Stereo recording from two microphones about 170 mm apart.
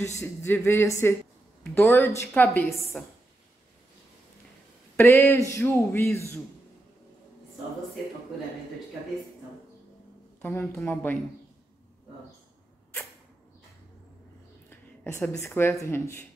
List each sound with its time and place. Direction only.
0.0 s speech: 15° left (ahead or behind)
4.9 s speech: 15° left (ahead or behind)
10.4 s speech: 15° left (ahead or behind)
14.7 s a woman's voice: 15° left (ahead or behind)